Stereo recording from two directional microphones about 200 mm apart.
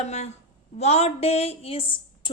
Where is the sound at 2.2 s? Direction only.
25° left (ahead or behind).